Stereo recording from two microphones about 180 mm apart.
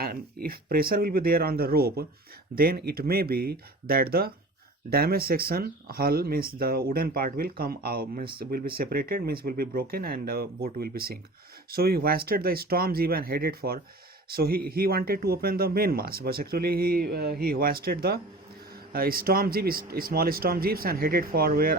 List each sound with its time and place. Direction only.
0.0 s speech: 55° right (ahead or behind)